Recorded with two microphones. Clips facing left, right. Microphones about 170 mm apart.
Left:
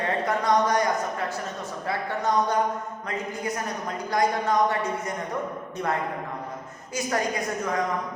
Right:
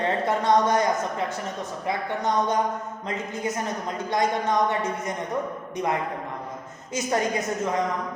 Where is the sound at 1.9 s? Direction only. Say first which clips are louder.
Even; 20° right (ahead or behind).